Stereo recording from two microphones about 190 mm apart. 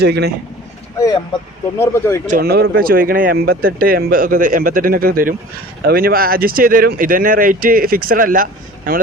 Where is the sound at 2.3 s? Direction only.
55° right (ahead or behind).